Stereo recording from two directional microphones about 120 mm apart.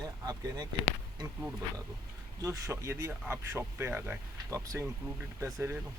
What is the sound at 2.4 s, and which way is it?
Speech, 30° right (ahead or behind).